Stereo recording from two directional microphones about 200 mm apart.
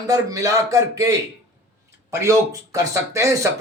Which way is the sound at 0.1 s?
15° right (ahead or behind).